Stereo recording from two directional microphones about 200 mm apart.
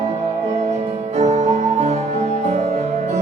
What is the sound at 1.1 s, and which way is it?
Music, 35° right (ahead or behind).